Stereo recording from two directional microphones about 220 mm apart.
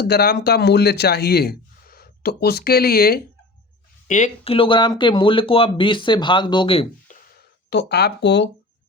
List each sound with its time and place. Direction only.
0.0 s speech: 45° left (ahead or behind)
4.1 s speech: 30° left (ahead or behind)
7.7 s speech: 50° left (ahead or behind)